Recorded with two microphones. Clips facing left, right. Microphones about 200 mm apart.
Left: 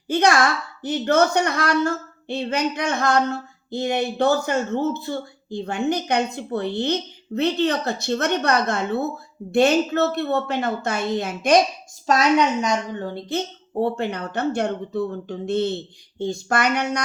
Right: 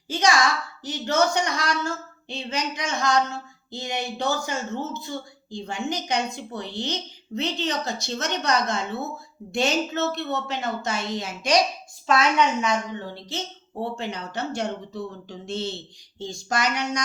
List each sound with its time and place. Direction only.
0.1 s speech: 60° left (ahead or behind)
12.0 s a woman's voice: 40° left (ahead or behind); by 17.0 s 60° left (ahead or behind)